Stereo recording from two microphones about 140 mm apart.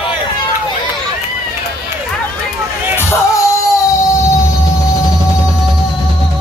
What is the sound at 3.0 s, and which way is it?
Music, 20° left (ahead or behind).